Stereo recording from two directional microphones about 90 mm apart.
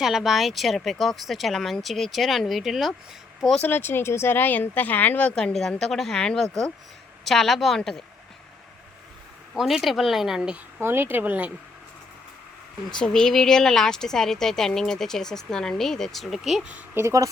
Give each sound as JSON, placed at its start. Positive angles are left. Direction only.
{"t": 0.0, "sound": "a woman's voice", "side_deg": -5}
{"t": 3.6, "sound": "a woman's voice", "side_deg": 20}
{"t": 9.6, "sound": "a woman's voice", "side_deg": -5}
{"t": 10.8, "sound": "speech", "side_deg": -25}
{"t": 12.9, "sound": "a woman's voice", "side_deg": 5}
{"t": 16.6, "sound": "a woman's voice", "side_deg": -15}
{"t": 17.0, "sound": "a woman's voice", "side_deg": -35}